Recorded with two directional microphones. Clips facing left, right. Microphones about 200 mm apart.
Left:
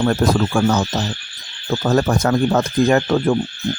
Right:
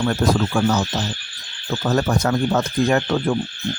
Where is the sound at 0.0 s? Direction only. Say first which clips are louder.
Left 3 dB; 50° left (ahead or behind).